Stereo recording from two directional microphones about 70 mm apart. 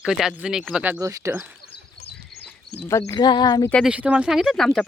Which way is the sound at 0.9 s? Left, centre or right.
Right.